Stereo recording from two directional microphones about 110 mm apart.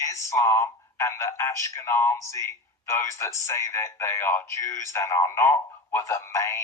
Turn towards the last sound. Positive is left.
turn(degrees=25)  # may be behind; listen again after turning